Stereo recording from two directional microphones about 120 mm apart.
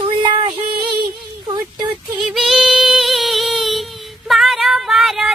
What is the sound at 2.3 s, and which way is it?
Female singing, centre (ahead or behind).